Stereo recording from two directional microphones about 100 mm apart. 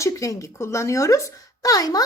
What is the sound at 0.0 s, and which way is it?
A woman's voice, 35° left (ahead or behind).